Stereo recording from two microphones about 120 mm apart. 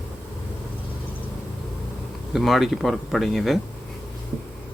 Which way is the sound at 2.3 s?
Centre (ahead or behind).